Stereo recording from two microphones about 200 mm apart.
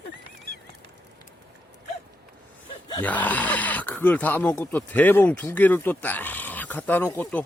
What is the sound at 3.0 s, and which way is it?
Speech, 10° left (ahead or behind).